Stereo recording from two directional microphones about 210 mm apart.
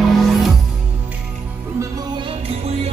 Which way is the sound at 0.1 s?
Centre (ahead or behind).